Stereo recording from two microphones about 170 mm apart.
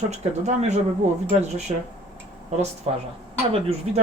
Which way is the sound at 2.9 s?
35° right (ahead or behind).